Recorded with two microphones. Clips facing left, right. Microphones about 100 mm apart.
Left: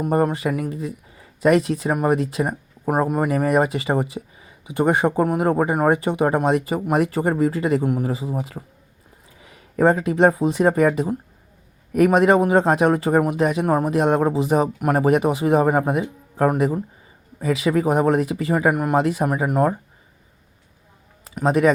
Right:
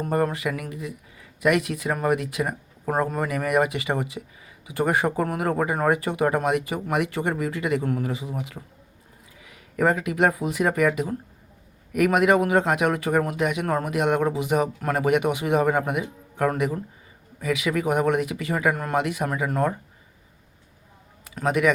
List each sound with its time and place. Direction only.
0.1 s speech: 25° left (ahead or behind)
13.7 s speech: 20° left (ahead or behind)
13.9 s speech: 30° left (ahead or behind)
18.7 s speech: 15° left (ahead or behind)
18.9 s speech: 30° left (ahead or behind)
21.4 s speech: 35° left (ahead or behind)